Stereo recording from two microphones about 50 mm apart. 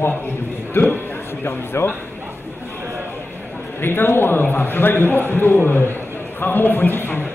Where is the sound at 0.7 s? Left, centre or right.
Left.